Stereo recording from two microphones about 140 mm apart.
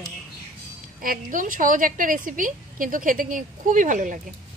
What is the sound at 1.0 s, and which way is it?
A woman's voice, 80° right.